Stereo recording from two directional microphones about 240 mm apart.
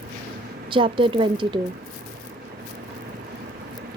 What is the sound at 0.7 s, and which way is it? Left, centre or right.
Speech, right.